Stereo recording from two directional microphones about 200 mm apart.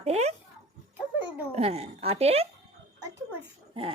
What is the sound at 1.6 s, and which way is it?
Speech, 30° right (ahead or behind).